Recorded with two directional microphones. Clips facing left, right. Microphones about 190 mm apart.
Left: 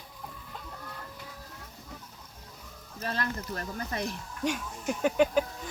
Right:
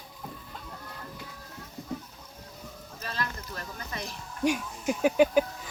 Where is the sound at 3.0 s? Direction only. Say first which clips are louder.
Left 3 dB; 55° left (ahead or behind).